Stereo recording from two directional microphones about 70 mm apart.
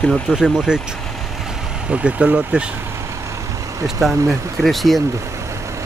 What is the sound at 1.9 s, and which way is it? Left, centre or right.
Speech, centre.